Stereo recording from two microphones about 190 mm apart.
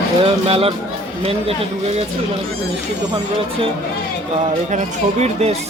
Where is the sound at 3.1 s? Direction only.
30° right (ahead or behind).